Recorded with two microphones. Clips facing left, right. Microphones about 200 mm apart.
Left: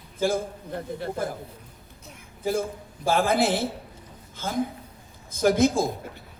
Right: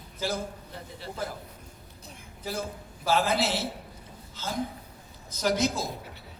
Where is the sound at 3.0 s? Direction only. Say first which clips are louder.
Left 4 dB; 50° left (ahead or behind).